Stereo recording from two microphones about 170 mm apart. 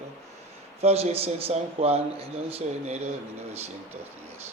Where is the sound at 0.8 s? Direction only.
40° right (ahead or behind).